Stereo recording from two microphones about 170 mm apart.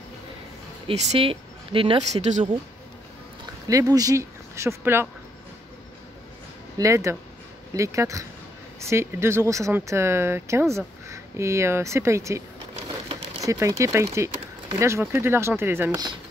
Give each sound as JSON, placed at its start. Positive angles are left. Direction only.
{"t": 0.8, "sound": "speech", "side_deg": -35}
{"t": 3.6, "sound": "speech", "side_deg": -20}
{"t": 6.8, "sound": "speech", "side_deg": -20}
{"t": 12.8, "sound": "crumpling", "side_deg": -30}
{"t": 13.4, "sound": "speech", "side_deg": -20}